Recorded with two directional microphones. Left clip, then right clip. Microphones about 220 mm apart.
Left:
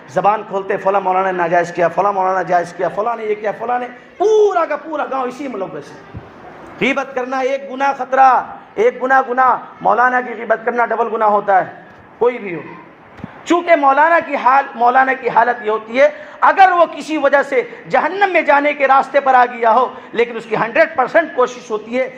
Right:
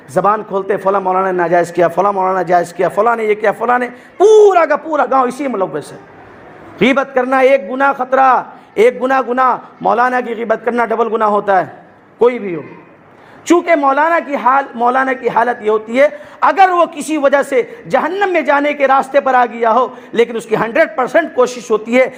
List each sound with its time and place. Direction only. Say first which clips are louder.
0.2 s a man's voice: right 2 dB; 50° right (ahead or behind)
6.7 s a man's voice: right 5 dB; 50° right (ahead or behind)